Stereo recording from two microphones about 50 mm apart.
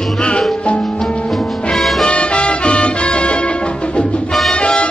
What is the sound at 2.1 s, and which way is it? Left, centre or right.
Music, left.